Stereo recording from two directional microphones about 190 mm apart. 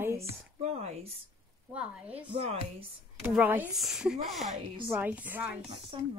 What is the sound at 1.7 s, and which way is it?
Speech, 5° right (ahead or behind).